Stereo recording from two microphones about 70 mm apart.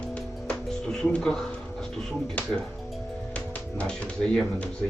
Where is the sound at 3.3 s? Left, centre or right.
Centre.